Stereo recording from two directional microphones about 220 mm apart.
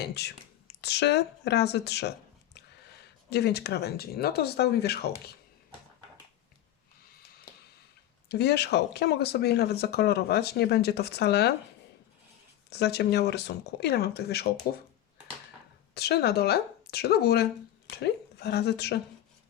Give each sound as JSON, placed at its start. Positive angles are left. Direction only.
{"t": 0.0, "sound": "speech", "side_deg": 50}
{"t": 3.2, "sound": "speech", "side_deg": 50}
{"t": 7.2, "sound": "a sound", "side_deg": 45}
{"t": 8.3, "sound": "speech", "side_deg": 50}
{"t": 12.7, "sound": "speech", "side_deg": 50}
{"t": 16.0, "sound": "speech", "side_deg": 45}